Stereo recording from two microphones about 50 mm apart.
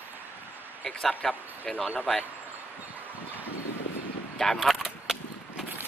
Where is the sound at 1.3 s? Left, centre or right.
Left.